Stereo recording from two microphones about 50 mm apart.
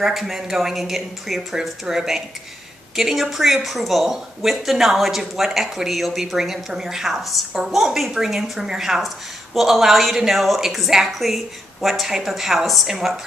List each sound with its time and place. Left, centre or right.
0.0 s speech: centre